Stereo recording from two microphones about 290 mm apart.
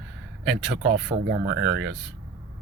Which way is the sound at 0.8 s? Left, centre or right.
Right.